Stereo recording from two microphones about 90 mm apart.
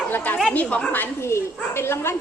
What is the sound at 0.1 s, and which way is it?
Chatter, 20° left (ahead or behind).